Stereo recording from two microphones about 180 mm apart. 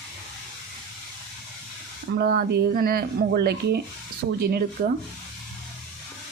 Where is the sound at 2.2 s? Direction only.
60° right (ahead or behind).